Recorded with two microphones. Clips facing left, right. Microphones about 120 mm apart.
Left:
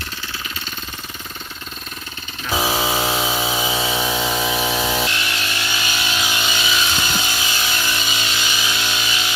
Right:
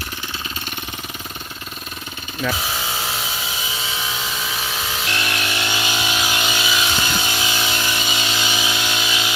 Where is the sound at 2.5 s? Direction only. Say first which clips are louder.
Left 7 dB; 85° left.